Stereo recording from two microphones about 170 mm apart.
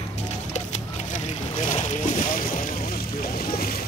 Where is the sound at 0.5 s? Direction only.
45° left (ahead or behind); by 3.8 s 60° left (ahead or behind).